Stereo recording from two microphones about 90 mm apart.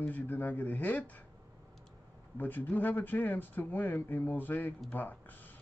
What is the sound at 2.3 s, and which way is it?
Speech, 20° left (ahead or behind).